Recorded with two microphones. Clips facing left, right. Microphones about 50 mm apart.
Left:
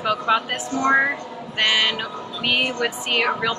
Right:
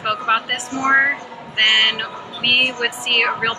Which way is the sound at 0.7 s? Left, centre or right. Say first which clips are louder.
Right 3 dB; right.